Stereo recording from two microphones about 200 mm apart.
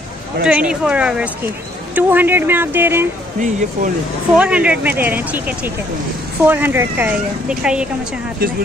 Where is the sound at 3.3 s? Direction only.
40° right (ahead or behind).